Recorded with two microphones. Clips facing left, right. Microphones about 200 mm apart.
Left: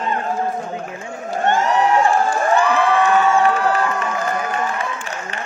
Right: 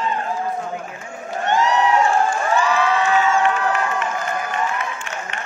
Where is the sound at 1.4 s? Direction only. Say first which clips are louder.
Left 1 dB; 50° left (ahead or behind).